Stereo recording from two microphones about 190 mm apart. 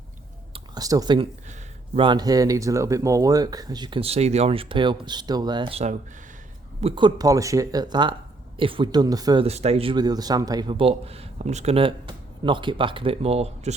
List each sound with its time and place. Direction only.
0.5 s a man's voice: 20° right (ahead or behind)
9.5 s a man's voice: 35° right (ahead or behind)